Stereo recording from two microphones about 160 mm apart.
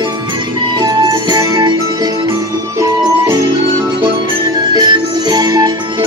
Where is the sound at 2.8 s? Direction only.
20° right (ahead or behind).